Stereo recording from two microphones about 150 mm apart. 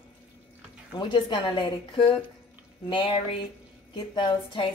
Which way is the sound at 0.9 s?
30° left (ahead or behind).